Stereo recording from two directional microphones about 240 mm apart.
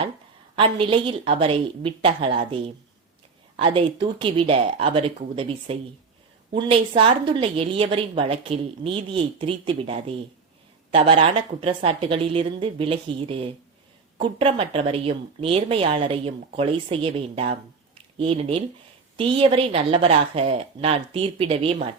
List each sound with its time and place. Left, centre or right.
0.6 s a woman's voice: right